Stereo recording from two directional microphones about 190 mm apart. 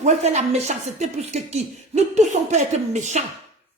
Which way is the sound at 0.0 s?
35° right (ahead or behind).